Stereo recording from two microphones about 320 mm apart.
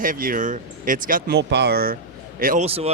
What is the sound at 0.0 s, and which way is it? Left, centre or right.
Speech, right.